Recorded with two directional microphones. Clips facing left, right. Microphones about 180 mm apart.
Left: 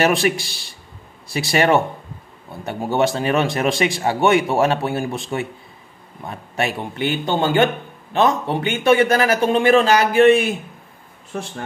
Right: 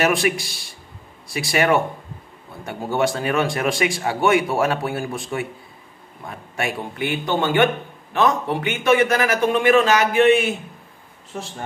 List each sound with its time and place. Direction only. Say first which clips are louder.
0.0 s a man's voice: left 2 dB; 30° left (ahead or behind)